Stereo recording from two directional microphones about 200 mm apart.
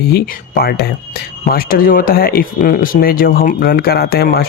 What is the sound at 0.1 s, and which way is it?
Speech, 50° left (ahead or behind).